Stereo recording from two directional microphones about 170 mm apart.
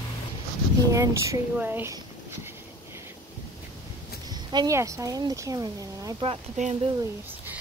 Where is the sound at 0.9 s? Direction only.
20° right (ahead or behind).